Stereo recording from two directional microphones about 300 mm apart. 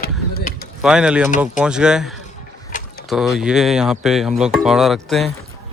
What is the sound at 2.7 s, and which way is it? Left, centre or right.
Mechanisms, left.